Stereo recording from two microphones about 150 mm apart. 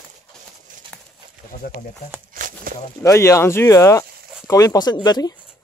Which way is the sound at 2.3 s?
65° right (ahead or behind).